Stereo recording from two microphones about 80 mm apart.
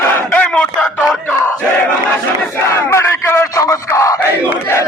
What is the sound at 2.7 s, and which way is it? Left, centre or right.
Crowd, left.